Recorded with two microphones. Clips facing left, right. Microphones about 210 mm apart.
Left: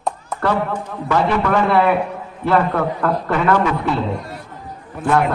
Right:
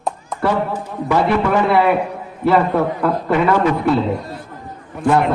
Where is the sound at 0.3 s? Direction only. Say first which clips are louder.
Right 1 dB; 10° right (ahead or behind).